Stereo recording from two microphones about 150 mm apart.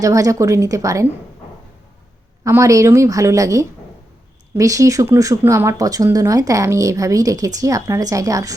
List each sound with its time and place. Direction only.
0.0 s speech: 20° right (ahead or behind)
2.4 s speech: 20° right (ahead or behind)